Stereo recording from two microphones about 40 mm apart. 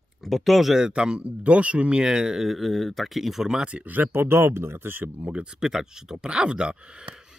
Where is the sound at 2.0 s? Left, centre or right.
Centre.